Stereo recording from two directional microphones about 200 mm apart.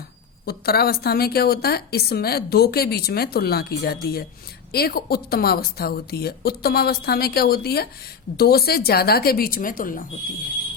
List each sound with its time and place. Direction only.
0.4 s a woman's voice: 50° left (ahead or behind)